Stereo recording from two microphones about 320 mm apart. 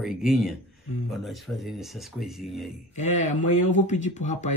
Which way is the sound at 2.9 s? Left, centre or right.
Left.